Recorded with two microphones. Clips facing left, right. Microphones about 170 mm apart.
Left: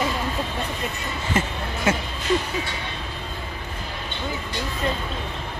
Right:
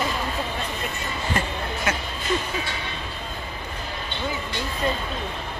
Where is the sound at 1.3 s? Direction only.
25° left (ahead or behind).